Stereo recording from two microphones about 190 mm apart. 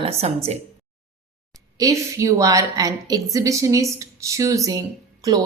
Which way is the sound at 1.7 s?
15° right (ahead or behind).